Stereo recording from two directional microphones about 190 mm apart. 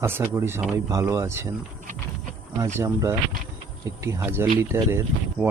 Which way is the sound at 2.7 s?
15° right (ahead or behind).